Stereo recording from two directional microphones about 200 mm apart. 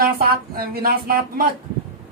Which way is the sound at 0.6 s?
50° right (ahead or behind).